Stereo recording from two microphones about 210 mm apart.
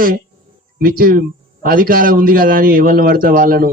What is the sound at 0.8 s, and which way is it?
A man's voice, 45° right (ahead or behind).